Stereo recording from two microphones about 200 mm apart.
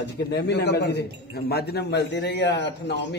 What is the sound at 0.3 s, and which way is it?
A man's voice, 55° left (ahead or behind).